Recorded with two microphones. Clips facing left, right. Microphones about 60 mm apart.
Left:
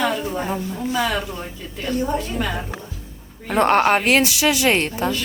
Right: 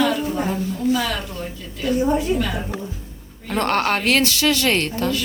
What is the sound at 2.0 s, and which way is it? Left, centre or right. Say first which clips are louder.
Speech: right 5 dB; centre.